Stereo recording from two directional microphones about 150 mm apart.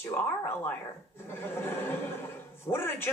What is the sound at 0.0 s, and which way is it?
A man's voice, 15° left (ahead or behind).